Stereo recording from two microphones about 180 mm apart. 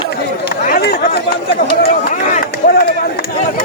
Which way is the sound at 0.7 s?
65° left (ahead or behind).